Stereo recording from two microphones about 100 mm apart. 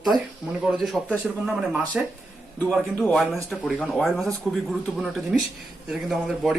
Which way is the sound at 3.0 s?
10° left (ahead or behind).